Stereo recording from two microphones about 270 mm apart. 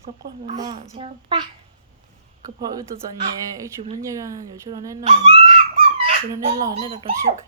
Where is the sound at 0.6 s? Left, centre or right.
Centre.